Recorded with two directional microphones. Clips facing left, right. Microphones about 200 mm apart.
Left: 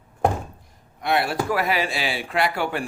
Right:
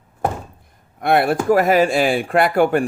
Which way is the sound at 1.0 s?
55° right (ahead or behind).